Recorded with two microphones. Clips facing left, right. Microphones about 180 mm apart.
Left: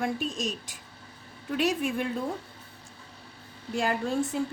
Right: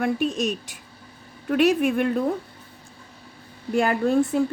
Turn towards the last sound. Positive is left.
turn(degrees=-60)  # may be behind; listen again after turning